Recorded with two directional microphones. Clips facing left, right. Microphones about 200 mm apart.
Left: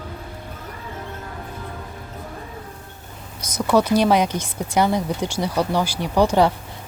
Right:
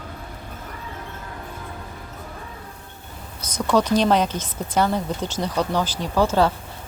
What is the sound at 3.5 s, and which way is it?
Speech, 10° left (ahead or behind).